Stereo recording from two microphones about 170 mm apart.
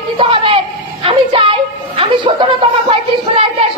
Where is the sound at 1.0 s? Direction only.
30° right (ahead or behind).